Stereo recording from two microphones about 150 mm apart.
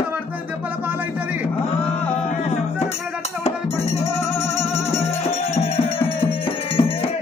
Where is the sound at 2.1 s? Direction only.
45° left (ahead or behind).